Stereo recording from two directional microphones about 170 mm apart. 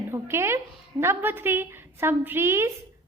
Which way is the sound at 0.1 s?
15° right (ahead or behind).